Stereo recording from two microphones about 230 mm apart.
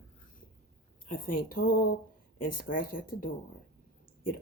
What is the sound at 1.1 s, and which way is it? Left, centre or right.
A woman's voice, left.